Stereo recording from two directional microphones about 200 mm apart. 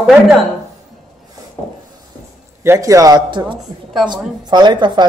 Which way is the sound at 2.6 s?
15° right (ahead or behind).